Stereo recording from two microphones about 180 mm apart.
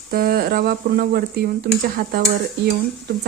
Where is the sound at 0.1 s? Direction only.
55° right (ahead or behind).